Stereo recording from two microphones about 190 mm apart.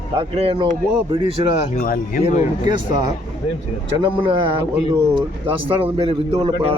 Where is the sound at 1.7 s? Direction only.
45° left (ahead or behind).